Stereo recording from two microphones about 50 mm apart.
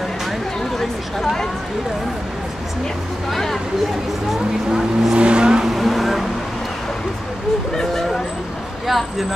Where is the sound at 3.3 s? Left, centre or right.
Centre.